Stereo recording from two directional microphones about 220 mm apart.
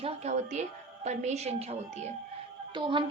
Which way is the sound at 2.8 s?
20° right (ahead or behind).